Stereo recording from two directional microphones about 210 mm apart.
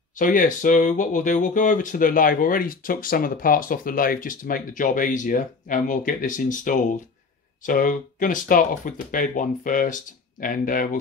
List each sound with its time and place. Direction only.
0.2 s speech: 40° left (ahead or behind)